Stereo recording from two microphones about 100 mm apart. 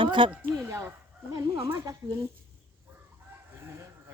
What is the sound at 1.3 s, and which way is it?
Speech, 35° right (ahead or behind).